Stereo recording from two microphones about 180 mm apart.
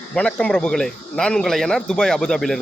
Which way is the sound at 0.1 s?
5° left (ahead or behind).